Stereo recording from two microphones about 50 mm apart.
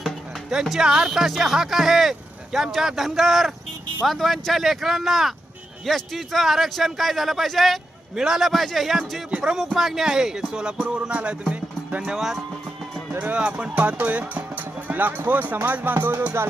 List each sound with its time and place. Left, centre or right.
0.5 s speech: centre
8.1 s speech: centre
9.4 s speech: centre
11.1 s music: right
12.1 s speech: centre
13.3 s speech: right
16.4 s music: right